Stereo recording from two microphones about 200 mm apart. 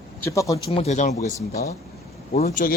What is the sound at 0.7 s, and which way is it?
Speech, 35° left (ahead or behind).